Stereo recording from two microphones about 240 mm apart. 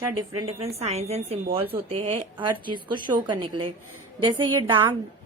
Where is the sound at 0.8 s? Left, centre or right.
Right.